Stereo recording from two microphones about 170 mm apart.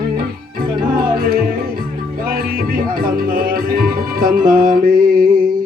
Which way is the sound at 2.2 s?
65° right (ahead or behind).